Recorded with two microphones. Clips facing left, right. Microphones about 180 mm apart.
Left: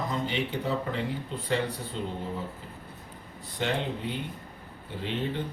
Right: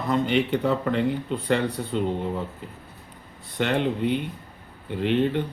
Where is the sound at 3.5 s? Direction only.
65° right (ahead or behind).